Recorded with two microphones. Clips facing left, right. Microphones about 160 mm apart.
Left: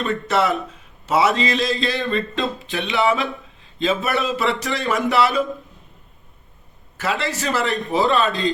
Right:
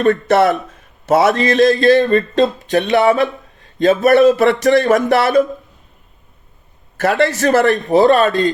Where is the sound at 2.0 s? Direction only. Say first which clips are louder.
Right 10 dB; 45° right (ahead or behind).